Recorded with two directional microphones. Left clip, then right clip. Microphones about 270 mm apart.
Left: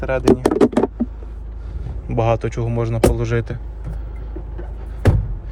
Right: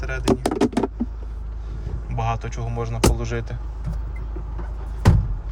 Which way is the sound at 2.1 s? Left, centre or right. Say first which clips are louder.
Left 8 dB; left.